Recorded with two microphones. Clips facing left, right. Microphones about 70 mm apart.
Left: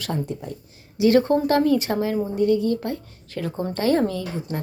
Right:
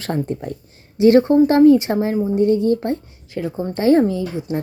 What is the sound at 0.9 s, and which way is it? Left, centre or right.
Speech, right.